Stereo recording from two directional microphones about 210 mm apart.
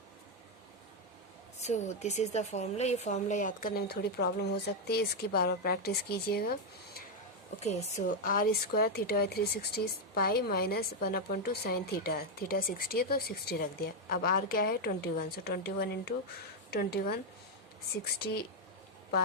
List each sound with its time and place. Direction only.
1.5 s a woman's voice: 35° left (ahead or behind)
7.6 s a woman's voice: 30° left (ahead or behind); by 17.2 s 50° left (ahead or behind)